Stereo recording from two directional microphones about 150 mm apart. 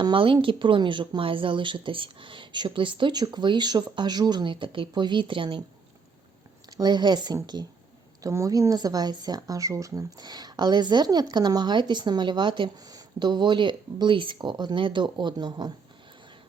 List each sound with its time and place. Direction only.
0.0 s speech: 35° right (ahead or behind)
6.7 s speech: 25° right (ahead or behind)